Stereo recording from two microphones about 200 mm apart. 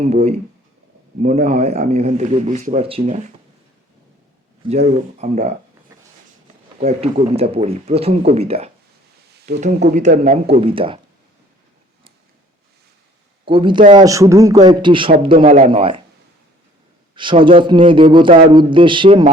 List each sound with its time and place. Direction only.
0.0 s a man's voice: 30° right (ahead or behind)
4.6 s a man's voice: 35° right (ahead or behind)
5.9 s a sound: 15° right (ahead or behind)
6.8 s a man's voice: 30° right (ahead or behind)
13.4 s a man's voice: 25° right (ahead or behind)
17.2 s a man's voice: 25° right (ahead or behind)